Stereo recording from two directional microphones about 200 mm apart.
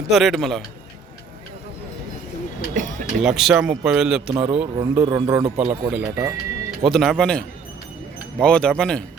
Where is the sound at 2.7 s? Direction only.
40° right (ahead or behind).